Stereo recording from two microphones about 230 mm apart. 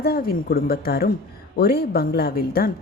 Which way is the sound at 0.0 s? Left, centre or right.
Left.